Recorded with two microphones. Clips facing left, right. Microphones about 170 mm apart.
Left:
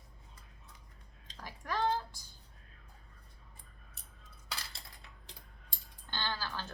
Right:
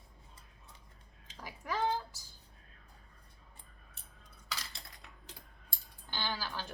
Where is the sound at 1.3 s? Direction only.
5° right (ahead or behind).